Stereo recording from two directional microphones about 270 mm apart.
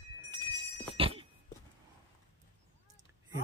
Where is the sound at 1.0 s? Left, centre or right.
Centre.